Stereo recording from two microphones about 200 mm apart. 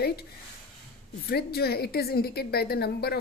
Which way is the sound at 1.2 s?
50° left (ahead or behind).